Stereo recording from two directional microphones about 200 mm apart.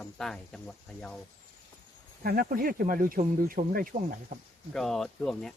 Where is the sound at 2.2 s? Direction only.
50° right (ahead or behind).